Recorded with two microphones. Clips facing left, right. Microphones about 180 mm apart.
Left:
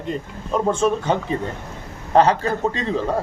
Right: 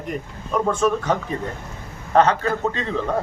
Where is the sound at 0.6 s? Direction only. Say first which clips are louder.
Left 1 dB; 25° left (ahead or behind).